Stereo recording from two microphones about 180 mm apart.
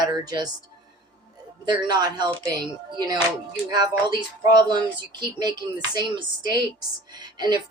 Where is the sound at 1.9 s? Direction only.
25° right (ahead or behind).